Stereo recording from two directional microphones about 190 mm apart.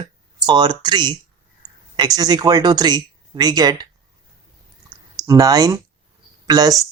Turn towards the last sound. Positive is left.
turn(degrees=-20)  # may be behind; listen again after turning